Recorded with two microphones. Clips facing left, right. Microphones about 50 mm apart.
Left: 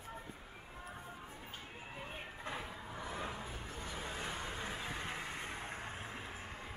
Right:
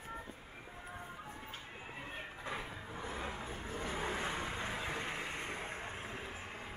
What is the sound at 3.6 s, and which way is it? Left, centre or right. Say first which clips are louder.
Music: right 5 dB; right.